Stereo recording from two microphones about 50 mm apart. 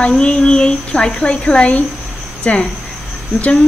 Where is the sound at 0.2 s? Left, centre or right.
Centre.